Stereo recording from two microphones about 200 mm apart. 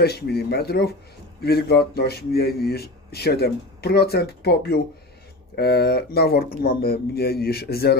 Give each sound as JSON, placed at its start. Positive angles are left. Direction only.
{"t": 0.0, "sound": "speech", "side_deg": 50}